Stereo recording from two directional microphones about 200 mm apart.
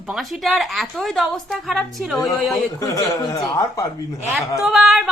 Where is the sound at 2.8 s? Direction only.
20° left (ahead or behind).